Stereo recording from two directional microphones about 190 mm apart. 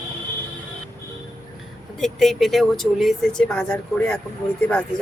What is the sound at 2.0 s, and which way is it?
Speech, centre (ahead or behind).